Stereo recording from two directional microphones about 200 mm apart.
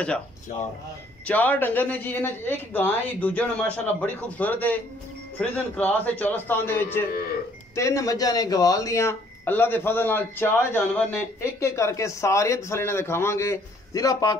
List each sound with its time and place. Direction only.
0.0 s speech: 5° left (ahead or behind)